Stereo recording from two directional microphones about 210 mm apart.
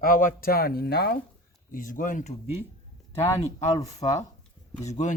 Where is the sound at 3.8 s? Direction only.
30° left (ahead or behind).